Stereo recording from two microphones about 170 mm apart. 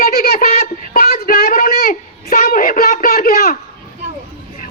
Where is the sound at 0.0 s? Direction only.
65° left (ahead or behind).